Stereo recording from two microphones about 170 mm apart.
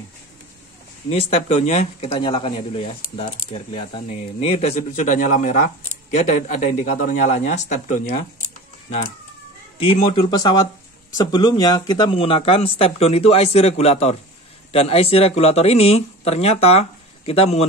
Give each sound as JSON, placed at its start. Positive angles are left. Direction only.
{"t": 1.1, "sound": "speech", "side_deg": 40}
{"t": 9.8, "sound": "speech", "side_deg": 35}